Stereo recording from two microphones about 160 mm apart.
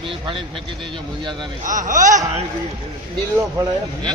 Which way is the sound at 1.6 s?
55° right (ahead or behind).